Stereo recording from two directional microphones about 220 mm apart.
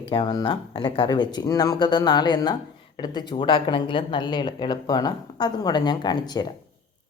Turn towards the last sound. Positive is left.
turn(degrees=20)  # may be behind; listen again after turning